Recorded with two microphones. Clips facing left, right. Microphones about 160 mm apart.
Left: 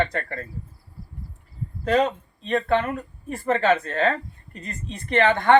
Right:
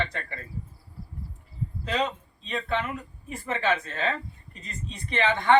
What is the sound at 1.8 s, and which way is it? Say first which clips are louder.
Speech: left 8 dB; 50° left (ahead or behind).